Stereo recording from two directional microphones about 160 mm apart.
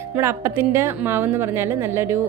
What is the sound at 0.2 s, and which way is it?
A woman's voice, 15° right (ahead or behind).